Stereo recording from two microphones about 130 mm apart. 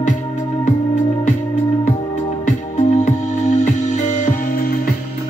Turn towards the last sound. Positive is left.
turn(degrees=75)  # may be behind; listen again after turning